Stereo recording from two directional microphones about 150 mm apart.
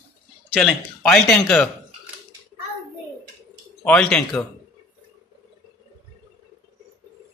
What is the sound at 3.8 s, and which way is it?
Speech, 10° left (ahead or behind).